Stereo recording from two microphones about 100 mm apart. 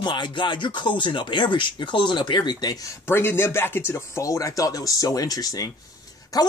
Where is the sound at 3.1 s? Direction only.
25° left (ahead or behind).